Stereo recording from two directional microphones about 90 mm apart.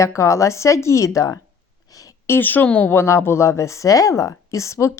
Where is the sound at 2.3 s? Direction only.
20° left (ahead or behind).